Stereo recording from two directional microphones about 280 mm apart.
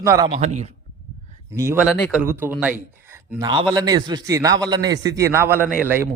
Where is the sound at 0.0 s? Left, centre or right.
Centre.